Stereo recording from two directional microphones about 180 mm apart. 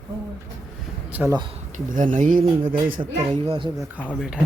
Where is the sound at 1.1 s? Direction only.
10° right (ahead or behind).